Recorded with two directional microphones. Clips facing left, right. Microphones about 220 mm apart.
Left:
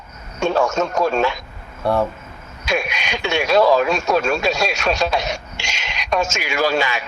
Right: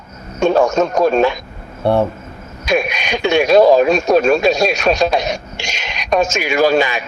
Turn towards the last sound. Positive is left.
turn(degrees=-15)  # may be behind; listen again after turning